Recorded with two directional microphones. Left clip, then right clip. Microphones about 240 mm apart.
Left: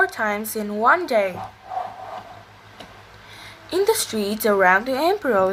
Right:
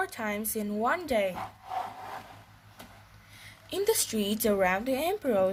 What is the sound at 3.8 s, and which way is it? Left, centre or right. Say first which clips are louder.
A woman's voice: left 5 dB; right.